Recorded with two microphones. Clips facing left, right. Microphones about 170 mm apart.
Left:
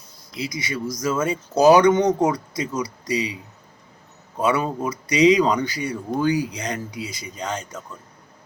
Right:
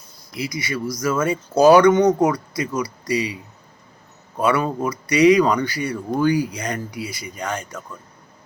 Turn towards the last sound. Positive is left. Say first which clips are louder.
# right 1 dB
turn(degrees=20)  # may be behind; listen again after turning